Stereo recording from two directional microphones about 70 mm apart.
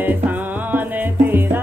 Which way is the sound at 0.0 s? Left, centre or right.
Right.